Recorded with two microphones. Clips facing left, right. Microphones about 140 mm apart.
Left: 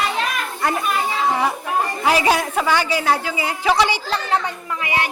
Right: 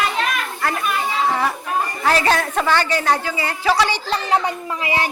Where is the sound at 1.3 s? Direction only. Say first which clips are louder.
Left 1 dB; 15° left (ahead or behind).